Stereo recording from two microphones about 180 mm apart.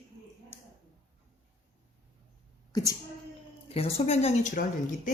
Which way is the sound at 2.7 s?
20° left (ahead or behind).